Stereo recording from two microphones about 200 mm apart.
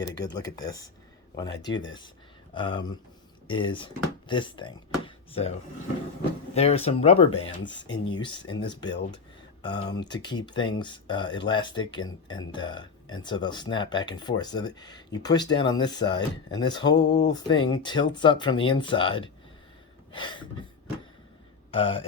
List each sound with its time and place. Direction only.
0.0 s speech: 20° left (ahead or behind)
17.1 s speech: 60° left (ahead or behind)
17.3 s speech: 20° left (ahead or behind)
21.7 s speech: 25° left (ahead or behind)